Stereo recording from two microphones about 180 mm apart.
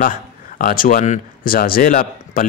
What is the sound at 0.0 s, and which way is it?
Speech, 50° left (ahead or behind).